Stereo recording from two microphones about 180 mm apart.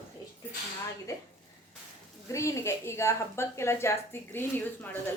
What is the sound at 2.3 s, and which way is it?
A woman's voice, 15° left (ahead or behind).